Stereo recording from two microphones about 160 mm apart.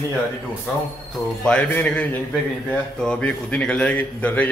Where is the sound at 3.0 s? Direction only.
10° left (ahead or behind).